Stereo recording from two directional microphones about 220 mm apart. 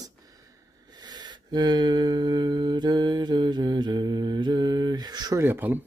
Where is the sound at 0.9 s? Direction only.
20° right (ahead or behind).